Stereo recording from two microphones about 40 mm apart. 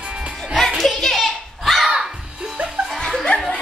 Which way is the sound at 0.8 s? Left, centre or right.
Centre.